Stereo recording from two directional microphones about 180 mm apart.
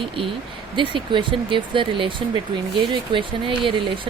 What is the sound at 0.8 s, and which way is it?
Speech, 25° right (ahead or behind).